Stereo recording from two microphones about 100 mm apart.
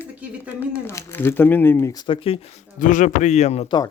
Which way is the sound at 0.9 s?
25° left (ahead or behind).